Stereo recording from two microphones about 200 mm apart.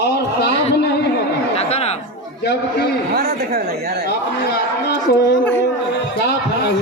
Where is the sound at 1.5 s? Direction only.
30° left (ahead or behind).